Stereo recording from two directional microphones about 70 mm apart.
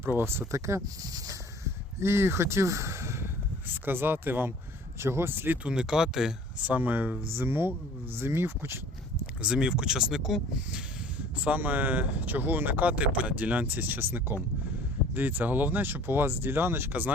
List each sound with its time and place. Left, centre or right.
0.0 s speech: right
2.0 s speech: right
5.6 s speech: centre
6.7 s speech: right
9.4 s speech: centre
11.3 s speech: right